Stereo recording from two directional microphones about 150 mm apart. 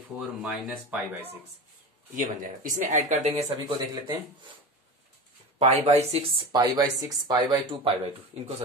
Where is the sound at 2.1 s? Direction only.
65° right (ahead or behind); by 3.4 s 45° right (ahead or behind).